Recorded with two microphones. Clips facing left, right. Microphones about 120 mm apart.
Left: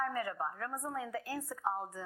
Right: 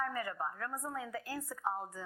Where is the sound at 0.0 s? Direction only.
45° left (ahead or behind).